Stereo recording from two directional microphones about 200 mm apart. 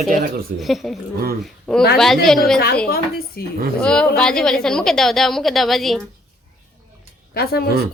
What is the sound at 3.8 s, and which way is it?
A woman's voice, 5° left (ahead or behind).